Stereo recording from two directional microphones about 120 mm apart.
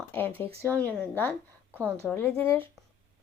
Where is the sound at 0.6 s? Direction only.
20° right (ahead or behind).